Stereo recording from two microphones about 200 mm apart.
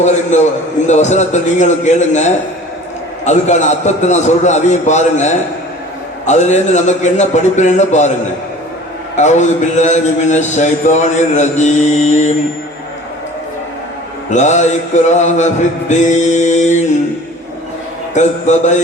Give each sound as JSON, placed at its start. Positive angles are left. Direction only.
{"t": 0.0, "sound": "a man's voice", "side_deg": 35}
{"t": 9.1, "sound": "a man's voice", "side_deg": 35}
{"t": 14.3, "sound": "a man's voice", "side_deg": 35}
{"t": 18.1, "sound": "a man's voice", "side_deg": 35}